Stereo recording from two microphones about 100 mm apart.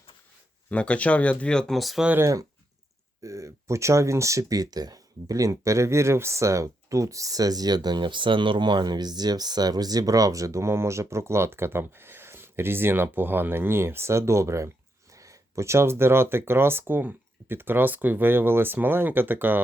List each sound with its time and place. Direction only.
0.7 s speech: 15° left (ahead or behind)
3.2 s speech: 30° right (ahead or behind)